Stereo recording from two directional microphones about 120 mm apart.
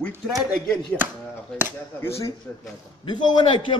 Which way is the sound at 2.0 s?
20° left (ahead or behind).